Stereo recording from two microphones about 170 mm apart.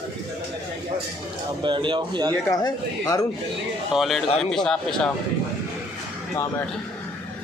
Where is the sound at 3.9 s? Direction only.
Centre (ahead or behind).